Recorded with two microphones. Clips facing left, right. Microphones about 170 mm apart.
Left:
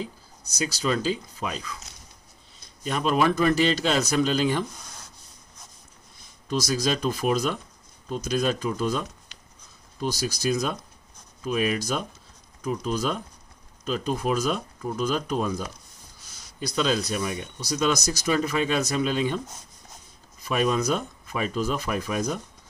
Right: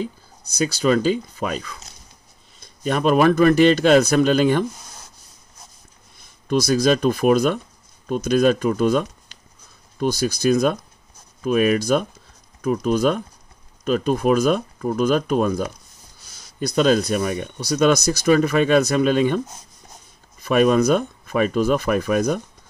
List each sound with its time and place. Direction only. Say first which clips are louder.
0.4 s speech: right 7 dB; 60° right (ahead or behind)
6.4 s speech: right 8 dB; 60° right (ahead or behind)
16.5 s speech: right 8 dB; 50° right (ahead or behind)